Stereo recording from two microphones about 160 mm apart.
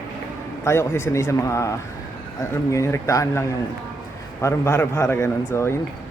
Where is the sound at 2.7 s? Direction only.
15° left (ahead or behind).